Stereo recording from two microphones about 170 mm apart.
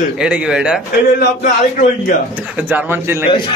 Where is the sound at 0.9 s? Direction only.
55° left (ahead or behind).